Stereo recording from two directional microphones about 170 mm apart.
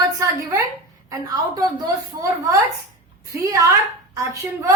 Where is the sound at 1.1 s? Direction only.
20° right (ahead or behind).